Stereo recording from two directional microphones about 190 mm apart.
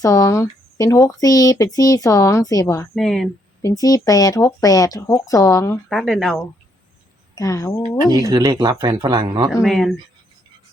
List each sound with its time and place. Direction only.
0.0 s speech: 15° left (ahead or behind)
2.9 s speech: centre (ahead or behind)
3.6 s speech: 20° left (ahead or behind)
5.9 s speech: centre (ahead or behind)
7.3 s speech: 15° left (ahead or behind)
8.1 s speech: 20° right (ahead or behind)
9.6 s speech: centre (ahead or behind)